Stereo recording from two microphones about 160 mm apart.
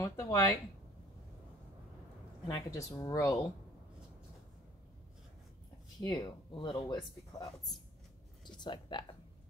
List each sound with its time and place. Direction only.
0.0 s speech: 20° left (ahead or behind)
2.4 s speech: 25° left (ahead or behind)
5.9 s speech: 25° left (ahead or behind)